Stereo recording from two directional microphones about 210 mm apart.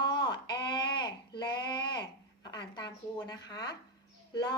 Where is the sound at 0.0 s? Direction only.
20° left (ahead or behind).